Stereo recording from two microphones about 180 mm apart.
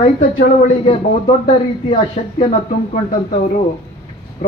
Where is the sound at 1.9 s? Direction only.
35° left (ahead or behind).